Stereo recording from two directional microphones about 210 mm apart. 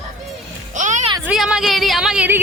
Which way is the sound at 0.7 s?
35° right (ahead or behind).